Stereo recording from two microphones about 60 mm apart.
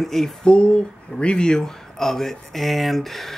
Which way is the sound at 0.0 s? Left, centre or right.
Centre.